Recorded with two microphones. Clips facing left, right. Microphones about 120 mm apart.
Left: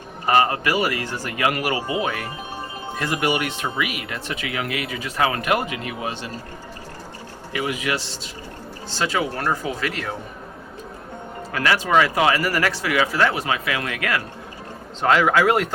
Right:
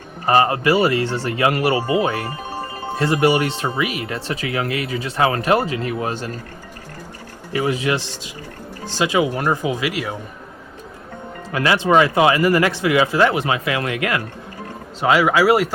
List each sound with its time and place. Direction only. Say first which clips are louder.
0.3 s speech: right 3 dB; 30° right (ahead or behind)
7.5 s speech: right 5 dB; 35° right (ahead or behind)
8.8 s speech: right 5 dB; 15° right (ahead or behind)
11.5 s speech: right 3 dB; 20° right (ahead or behind)
15.0 s speech: right 2 dB; 5° right (ahead or behind)